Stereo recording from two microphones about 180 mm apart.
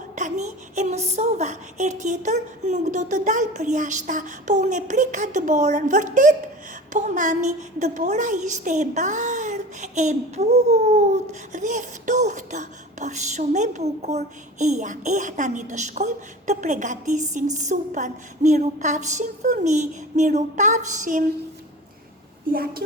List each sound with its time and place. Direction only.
0.2 s speech: 45° right (ahead or behind)
22.5 s a woman's voice: 55° right (ahead or behind)